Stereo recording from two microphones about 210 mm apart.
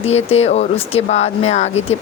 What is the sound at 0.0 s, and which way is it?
Speech, 30° left (ahead or behind).